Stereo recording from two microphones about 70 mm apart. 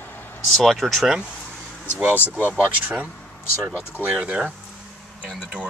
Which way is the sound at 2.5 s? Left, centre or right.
Right.